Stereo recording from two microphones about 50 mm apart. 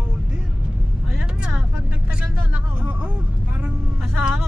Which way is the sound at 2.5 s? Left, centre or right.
Right.